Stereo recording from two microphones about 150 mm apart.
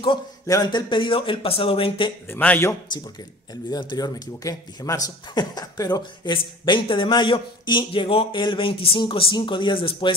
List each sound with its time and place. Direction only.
0.5 s speech: 25° left (ahead or behind)
2.2 s a man's voice: 10° left (ahead or behind)
3.7 s speech: 25° left (ahead or behind)